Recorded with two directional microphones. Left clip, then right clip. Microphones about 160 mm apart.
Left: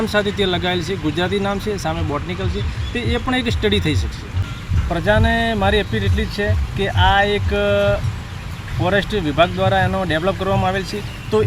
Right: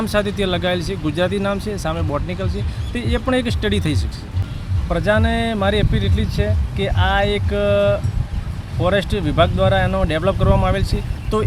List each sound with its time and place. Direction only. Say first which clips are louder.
0.1 s speech: right 1 dB; 30° right (ahead or behind)
4.9 s speech: left 1 dB; 30° right (ahead or behind)